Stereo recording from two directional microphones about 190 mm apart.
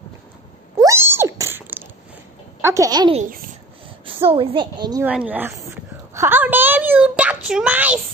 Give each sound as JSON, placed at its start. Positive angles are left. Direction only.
{"t": 0.7, "sound": "cat", "side_deg": -15}
{"t": 2.6, "sound": "a woman's voice", "side_deg": -15}
{"t": 5.0, "sound": "speech", "side_deg": -5}
{"t": 6.1, "sound": "a sound", "side_deg": -10}